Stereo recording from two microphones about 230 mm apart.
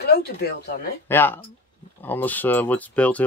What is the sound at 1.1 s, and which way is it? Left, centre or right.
Speech, centre.